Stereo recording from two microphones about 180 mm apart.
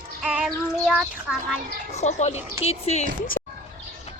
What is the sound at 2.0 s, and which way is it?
A woman's voice, 40° left (ahead or behind).